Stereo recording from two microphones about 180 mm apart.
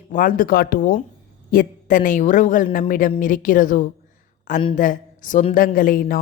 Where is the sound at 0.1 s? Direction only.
50° left (ahead or behind).